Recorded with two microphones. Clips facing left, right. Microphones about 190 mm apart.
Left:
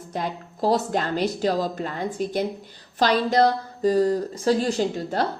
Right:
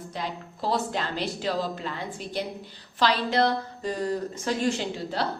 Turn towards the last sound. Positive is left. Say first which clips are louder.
# left 6 dB
turn(degrees=45)  # may be behind; listen again after turning